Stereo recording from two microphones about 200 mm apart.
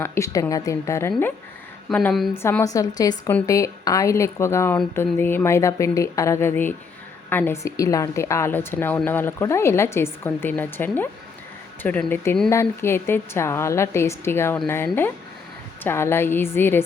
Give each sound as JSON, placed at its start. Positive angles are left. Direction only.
{"t": 0.0, "sound": "a woman's voice", "side_deg": 15}
{"t": 2.3, "sound": "a woman's voice", "side_deg": 10}